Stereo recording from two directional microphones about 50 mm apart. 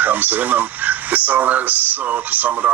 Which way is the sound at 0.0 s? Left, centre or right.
Right.